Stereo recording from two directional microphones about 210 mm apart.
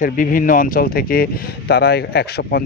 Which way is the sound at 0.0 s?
40° left (ahead or behind).